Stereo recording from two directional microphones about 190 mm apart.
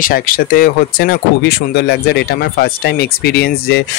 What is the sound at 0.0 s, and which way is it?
Speech, 50° left (ahead or behind).